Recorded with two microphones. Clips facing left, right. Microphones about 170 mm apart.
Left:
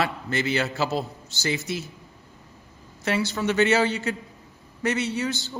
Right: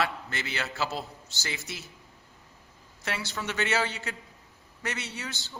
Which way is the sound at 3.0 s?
Centre (ahead or behind).